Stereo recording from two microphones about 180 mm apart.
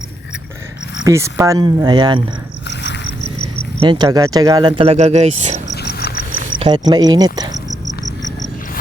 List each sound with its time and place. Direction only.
1.0 s speech: 15° right (ahead or behind)
2.6 s cricket: 75° left (ahead or behind)
3.8 s speech: 25° right (ahead or behind); by 5.7 s 40° right (ahead or behind)
5.7 s a sound: 65° left (ahead or behind)
6.6 s speech: 25° right (ahead or behind)